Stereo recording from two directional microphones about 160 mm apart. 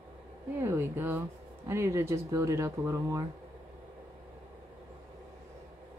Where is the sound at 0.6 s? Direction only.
15° right (ahead or behind).